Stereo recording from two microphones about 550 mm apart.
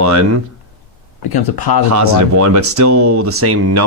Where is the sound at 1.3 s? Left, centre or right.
Left.